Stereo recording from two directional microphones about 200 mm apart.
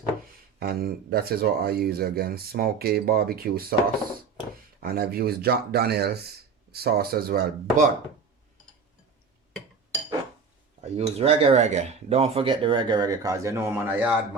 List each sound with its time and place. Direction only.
0.6 s speech: 50° right (ahead or behind)
4.8 s speech: 50° right (ahead or behind)
10.8 s speech: 30° right (ahead or behind); by 14.2 s 10° right (ahead or behind)